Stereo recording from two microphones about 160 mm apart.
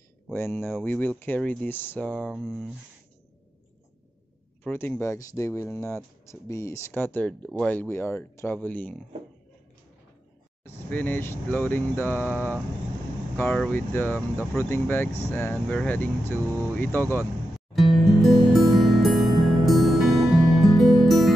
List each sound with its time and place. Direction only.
0.3 s speech: 10° left (ahead or behind)
4.6 s speech: 10° left (ahead or behind)
10.9 s speech: 10° left (ahead or behind)
12.3 s speech: 10° right (ahead or behind)
13.4 s speech: 10° left (ahead or behind)
18.0 s music: centre (ahead or behind)